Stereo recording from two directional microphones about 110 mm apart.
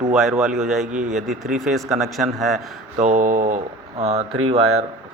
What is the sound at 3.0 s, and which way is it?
Speech, 90° right.